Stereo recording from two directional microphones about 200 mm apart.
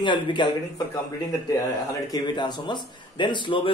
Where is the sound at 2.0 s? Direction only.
20° left (ahead or behind).